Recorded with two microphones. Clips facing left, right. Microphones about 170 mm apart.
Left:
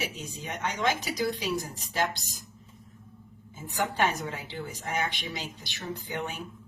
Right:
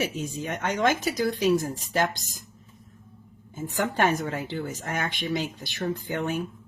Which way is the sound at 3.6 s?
50° right (ahead or behind).